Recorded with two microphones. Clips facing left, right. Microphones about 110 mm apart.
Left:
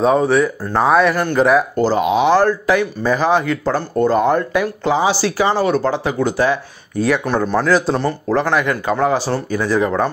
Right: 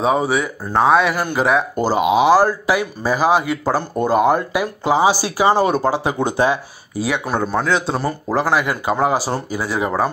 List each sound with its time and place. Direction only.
0.0 s speech: 5° right (ahead or behind)
1.8 s speech: 15° right (ahead or behind)
7.0 s speech: 5° right (ahead or behind)